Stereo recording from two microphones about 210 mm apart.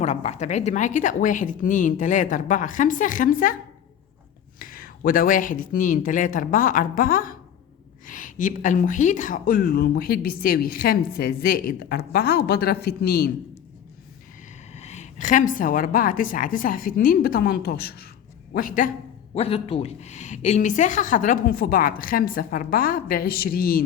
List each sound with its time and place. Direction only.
0.0 s a woman's voice: 30° left (ahead or behind)
4.6 s a woman's voice: 45° left (ahead or behind)
14.7 s a woman's voice: 30° left (ahead or behind)
19.3 s a woman's voice: 25° left (ahead or behind); by 23.8 s 45° left (ahead or behind)